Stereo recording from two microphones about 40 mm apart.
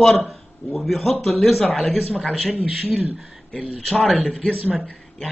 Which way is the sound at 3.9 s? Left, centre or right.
Centre.